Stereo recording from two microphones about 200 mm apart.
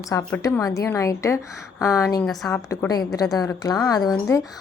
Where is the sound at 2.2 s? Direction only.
Centre (ahead or behind).